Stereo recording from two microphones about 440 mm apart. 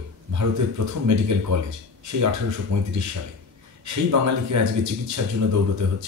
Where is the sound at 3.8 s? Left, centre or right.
Right.